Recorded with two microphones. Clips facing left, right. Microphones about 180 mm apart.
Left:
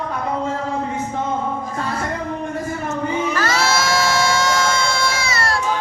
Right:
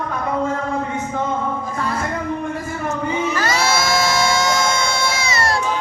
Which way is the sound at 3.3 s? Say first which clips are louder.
Even; 15° right (ahead or behind).